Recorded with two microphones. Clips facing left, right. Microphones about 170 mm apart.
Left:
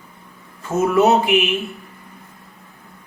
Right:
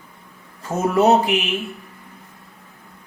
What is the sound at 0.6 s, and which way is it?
Mantra, 35° right (ahead or behind).